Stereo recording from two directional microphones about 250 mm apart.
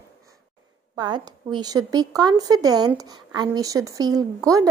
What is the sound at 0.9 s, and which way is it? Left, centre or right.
A woman's voice, centre.